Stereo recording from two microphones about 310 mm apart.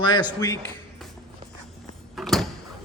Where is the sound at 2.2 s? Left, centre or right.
Centre.